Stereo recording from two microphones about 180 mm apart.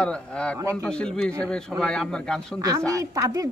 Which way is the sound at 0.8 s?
5° left (ahead or behind).